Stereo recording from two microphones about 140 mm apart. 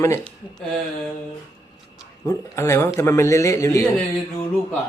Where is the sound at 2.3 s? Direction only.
20° left (ahead or behind).